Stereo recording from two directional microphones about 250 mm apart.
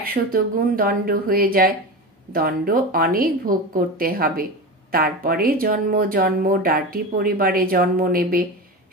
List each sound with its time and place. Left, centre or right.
0.0 s speech: right